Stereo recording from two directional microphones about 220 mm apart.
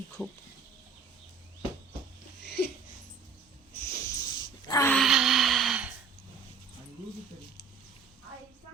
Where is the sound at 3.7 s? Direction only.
15° left (ahead or behind).